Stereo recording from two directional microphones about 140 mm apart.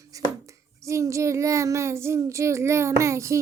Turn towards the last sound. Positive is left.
turn(degrees=-20)  # may be behind; listen again after turning